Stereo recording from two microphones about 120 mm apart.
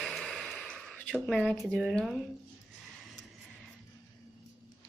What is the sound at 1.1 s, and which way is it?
Speech, 5° left (ahead or behind).